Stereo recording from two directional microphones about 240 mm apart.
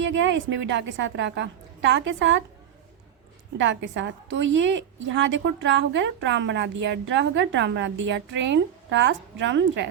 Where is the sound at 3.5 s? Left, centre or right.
Right.